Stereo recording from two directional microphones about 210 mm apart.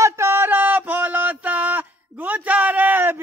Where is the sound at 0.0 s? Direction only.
15° right (ahead or behind).